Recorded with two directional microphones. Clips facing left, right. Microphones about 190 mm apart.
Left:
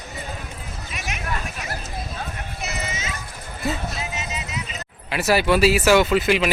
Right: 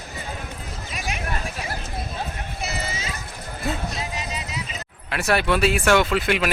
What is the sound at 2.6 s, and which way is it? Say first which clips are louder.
Clip-clop: even; 30° right (ahead or behind).